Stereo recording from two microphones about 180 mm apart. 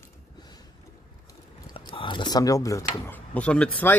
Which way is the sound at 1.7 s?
30° left (ahead or behind).